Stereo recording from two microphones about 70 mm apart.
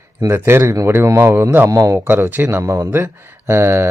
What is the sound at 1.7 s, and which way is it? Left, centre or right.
Speech, right.